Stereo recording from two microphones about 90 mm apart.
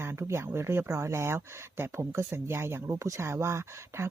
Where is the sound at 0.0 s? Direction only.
30° right (ahead or behind).